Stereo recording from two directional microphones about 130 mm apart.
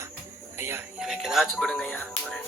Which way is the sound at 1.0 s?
5° right (ahead or behind).